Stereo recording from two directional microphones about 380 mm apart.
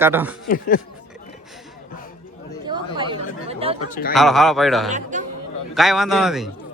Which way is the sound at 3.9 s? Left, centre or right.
Left.